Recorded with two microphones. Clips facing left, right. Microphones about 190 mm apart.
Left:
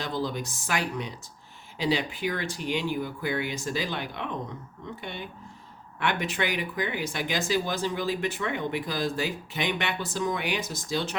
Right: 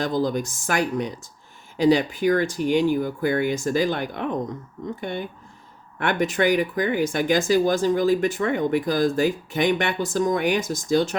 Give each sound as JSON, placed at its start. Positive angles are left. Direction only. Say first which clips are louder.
{"t": 0.0, "sound": "speech", "louder": "right 7 dB", "side_deg": -45}